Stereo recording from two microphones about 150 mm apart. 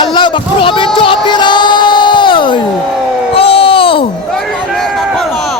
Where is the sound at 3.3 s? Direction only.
40° left (ahead or behind).